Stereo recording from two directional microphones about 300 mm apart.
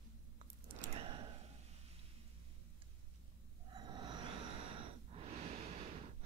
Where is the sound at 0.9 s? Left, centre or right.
Centre.